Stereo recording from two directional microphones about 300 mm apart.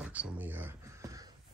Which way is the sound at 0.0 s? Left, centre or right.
Centre.